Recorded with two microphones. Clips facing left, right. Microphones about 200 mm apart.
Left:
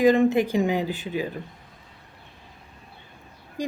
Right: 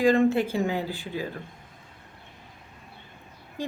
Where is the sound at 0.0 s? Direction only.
20° left (ahead or behind).